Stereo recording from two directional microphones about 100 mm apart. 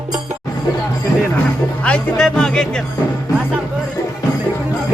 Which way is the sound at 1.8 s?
5° left (ahead or behind).